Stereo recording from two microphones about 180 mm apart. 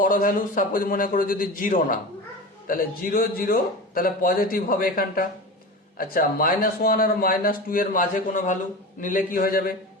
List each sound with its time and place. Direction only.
0.0 s speech: 45° left (ahead or behind)